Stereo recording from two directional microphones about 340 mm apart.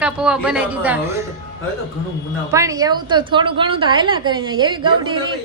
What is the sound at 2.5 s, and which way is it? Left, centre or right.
A woman's voice, centre.